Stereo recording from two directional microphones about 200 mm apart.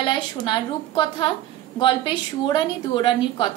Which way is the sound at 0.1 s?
25° left (ahead or behind).